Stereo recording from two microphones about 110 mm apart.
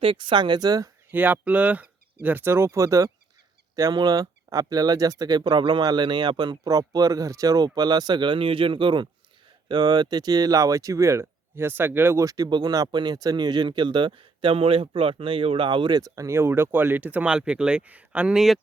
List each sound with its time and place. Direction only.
0.0 s speech: 50° right (ahead or behind)
1.1 s speech: 15° right (ahead or behind)